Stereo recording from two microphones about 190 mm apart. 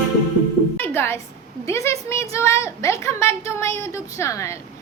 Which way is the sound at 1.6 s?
15° left (ahead or behind).